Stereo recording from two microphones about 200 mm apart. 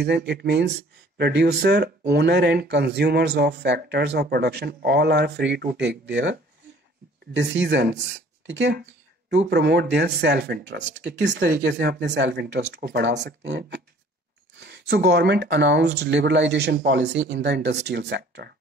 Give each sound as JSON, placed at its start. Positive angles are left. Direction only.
{"t": 0.0, "sound": "speech", "side_deg": -55}
{"t": 7.3, "sound": "speech", "side_deg": -65}